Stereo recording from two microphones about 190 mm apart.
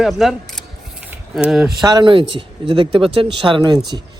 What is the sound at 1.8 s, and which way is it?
Speech, 20° right (ahead or behind).